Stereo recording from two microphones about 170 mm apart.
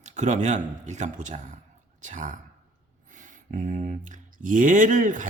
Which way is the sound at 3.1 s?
50° right (ahead or behind).